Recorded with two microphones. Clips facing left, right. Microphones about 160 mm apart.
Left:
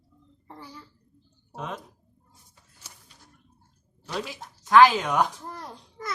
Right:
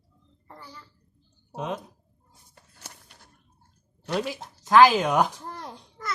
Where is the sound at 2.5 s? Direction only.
65° right (ahead or behind).